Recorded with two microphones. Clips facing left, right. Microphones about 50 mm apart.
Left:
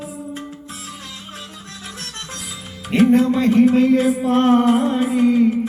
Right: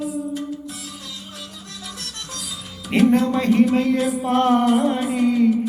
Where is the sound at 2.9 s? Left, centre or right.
Centre.